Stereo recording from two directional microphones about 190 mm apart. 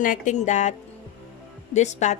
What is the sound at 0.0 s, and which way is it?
A woman's voice, 40° left (ahead or behind).